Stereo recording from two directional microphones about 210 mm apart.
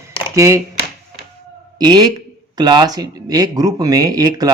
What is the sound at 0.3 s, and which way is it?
Speech, 15° right (ahead or behind).